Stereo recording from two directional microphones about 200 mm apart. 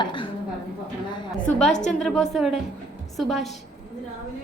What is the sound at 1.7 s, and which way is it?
Speech, 35° left (ahead or behind).